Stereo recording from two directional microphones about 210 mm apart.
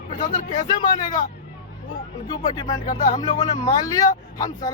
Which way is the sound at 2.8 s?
35° left (ahead or behind).